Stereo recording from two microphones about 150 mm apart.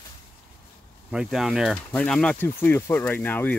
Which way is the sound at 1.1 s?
5° right (ahead or behind).